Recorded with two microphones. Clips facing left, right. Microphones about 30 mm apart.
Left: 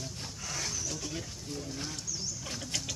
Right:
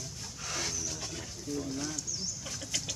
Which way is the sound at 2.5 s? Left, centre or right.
Centre.